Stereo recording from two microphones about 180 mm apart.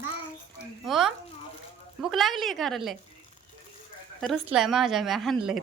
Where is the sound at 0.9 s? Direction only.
Centre (ahead or behind).